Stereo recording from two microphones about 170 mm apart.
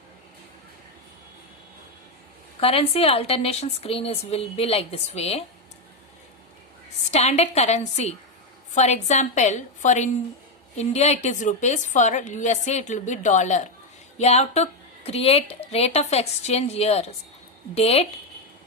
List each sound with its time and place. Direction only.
2.6 s a woman's voice: 35° left (ahead or behind)
7.1 s a woman's voice: 40° left (ahead or behind)